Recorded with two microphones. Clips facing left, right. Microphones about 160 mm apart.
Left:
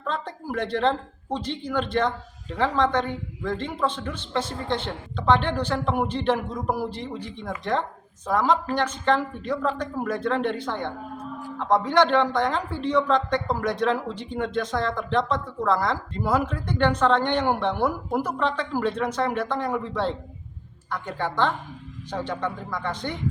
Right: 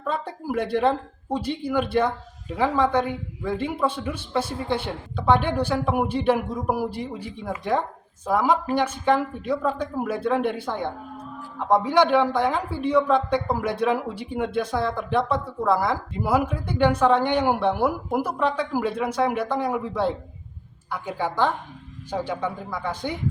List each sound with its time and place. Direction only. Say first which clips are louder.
0.0 s a woman's voice: right 2 dB; 10° right (ahead or behind)